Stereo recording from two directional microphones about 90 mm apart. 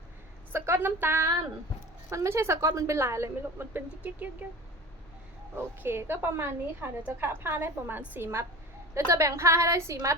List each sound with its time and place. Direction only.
0.5 s a woman's voice: 25° right (ahead or behind)
5.5 s a woman's voice: 25° right (ahead or behind)